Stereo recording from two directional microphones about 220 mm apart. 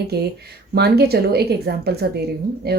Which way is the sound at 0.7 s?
45° right (ahead or behind).